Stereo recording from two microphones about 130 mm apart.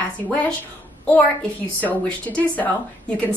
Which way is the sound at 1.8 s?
10° left (ahead or behind).